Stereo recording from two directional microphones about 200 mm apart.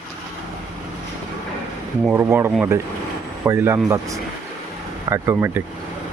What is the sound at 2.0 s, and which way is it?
Speech, 10° right (ahead or behind).